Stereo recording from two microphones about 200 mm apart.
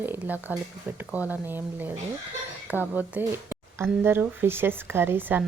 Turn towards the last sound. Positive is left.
turn(degrees=-10)  # may be behind; listen again after turning